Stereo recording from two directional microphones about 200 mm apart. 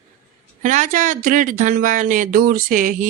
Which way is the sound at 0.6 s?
40° right (ahead or behind).